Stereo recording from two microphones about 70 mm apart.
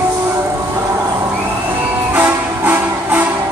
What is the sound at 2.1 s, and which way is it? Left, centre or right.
Music, right.